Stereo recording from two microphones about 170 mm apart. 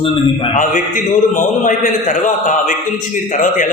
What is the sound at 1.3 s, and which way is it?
A man's voice, 50° left (ahead or behind).